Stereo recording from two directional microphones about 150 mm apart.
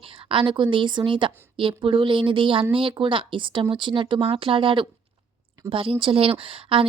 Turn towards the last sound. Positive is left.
turn(degrees=-35)  # may be behind; listen again after turning